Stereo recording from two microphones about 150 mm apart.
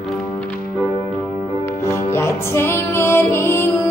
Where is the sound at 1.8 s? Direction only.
15° left (ahead or behind).